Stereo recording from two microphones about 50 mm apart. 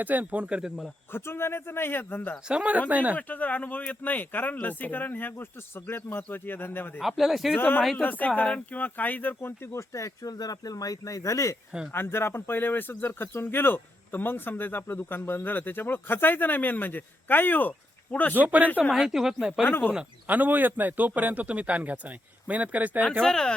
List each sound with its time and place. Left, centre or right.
0.0 s a man's voice: right
1.1 s speech: left
2.5 s a man's voice: right
3.2 s speech: left
7.2 s speech: centre
7.5 s speech: left
9.7 s speech: left
11.1 s speech: left
11.9 s speech: left
18.3 s a man's voice: right
18.8 s speech: centre
19.6 s speech: left
20.2 s a man's voice: right
23.2 s speech: centre